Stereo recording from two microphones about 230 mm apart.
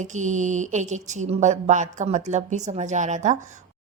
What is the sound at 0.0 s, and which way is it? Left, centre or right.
Mantra, right.